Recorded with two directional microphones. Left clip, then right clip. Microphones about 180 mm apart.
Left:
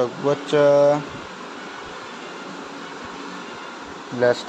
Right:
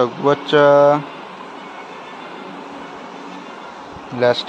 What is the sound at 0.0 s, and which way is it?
Speech, 15° right (ahead or behind).